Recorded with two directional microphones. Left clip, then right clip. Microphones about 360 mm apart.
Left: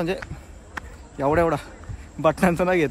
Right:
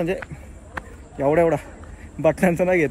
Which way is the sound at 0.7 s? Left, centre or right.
Centre.